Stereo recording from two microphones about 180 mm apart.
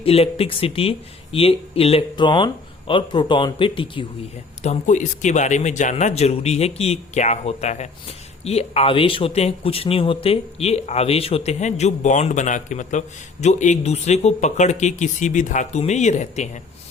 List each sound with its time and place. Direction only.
0.0 s speech: 35° left (ahead or behind)
4.6 s speech: 40° left (ahead or behind)